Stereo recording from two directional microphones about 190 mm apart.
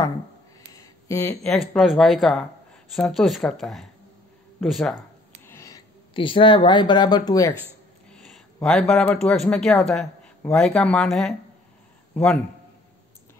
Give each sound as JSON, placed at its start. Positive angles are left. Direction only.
{"t": 0.7, "sound": "a sound", "side_deg": 15}
{"t": 1.4, "sound": "speech", "side_deg": 0}
{"t": 5.5, "sound": "sniff", "side_deg": 15}
{"t": 6.1, "sound": "speech", "side_deg": 25}
{"t": 8.1, "sound": "a man's voice", "side_deg": 5}